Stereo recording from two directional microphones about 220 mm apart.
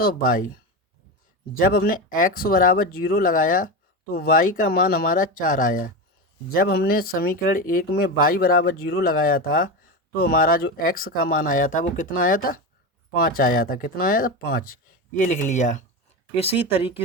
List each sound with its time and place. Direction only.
0.0 s speech: 40° left (ahead or behind); by 17.0 s 25° left (ahead or behind)